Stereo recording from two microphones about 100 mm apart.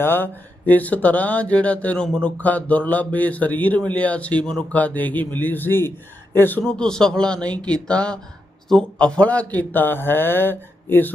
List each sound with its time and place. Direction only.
0.0 s speech: 20° left (ahead or behind)
6.6 s speech: 10° left (ahead or behind)